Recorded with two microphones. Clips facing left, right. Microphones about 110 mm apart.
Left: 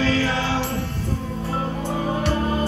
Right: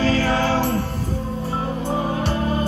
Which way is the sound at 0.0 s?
45° right (ahead or behind).